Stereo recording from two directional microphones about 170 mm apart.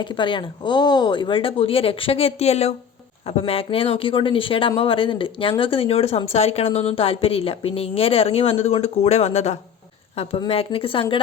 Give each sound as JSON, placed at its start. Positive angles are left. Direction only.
{"t": 0.0, "sound": "speech", "side_deg": 30}